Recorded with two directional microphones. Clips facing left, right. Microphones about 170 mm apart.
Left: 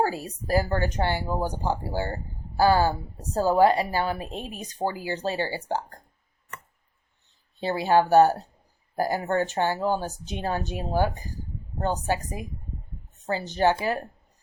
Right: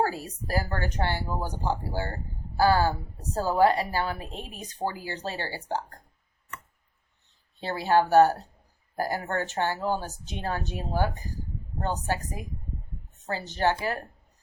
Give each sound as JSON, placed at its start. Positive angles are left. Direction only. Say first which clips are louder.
{"t": 0.0, "sound": "speech", "louder": "left 2 dB", "side_deg": 15}
{"t": 7.6, "sound": "speech", "louder": "left 2 dB", "side_deg": 15}
{"t": 13.2, "sound": "speech", "louder": "left 4 dB", "side_deg": 15}